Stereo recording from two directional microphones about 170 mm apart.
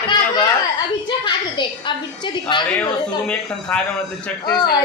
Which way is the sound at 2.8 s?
5° left (ahead or behind).